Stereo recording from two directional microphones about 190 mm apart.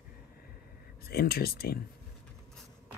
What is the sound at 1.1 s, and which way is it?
Speech, 55° left (ahead or behind).